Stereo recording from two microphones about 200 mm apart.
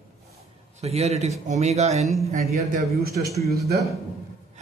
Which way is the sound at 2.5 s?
50° right (ahead or behind).